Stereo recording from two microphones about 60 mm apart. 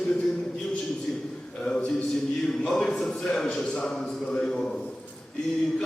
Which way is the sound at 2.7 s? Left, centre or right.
Centre.